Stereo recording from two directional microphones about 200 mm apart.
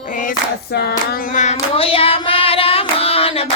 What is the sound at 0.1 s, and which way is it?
Hands, 40° left (ahead or behind).